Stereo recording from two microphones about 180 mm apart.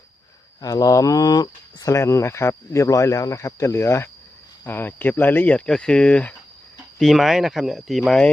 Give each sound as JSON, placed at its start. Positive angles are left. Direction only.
{"t": 0.6, "sound": "speech", "side_deg": 20}